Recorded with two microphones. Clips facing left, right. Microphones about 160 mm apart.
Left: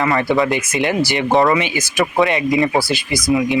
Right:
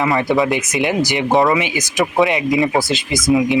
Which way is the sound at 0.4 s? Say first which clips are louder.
Even; 20° right (ahead or behind).